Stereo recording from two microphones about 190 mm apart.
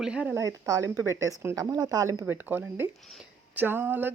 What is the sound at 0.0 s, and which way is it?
Speech, 5° right (ahead or behind).